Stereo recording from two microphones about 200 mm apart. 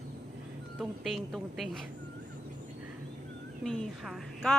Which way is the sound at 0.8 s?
Centre (ahead or behind).